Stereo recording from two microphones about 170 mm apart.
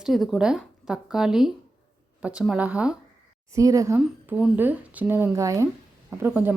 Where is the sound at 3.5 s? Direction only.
20° right (ahead or behind).